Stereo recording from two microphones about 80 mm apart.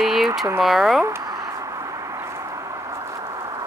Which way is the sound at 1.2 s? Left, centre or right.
Right.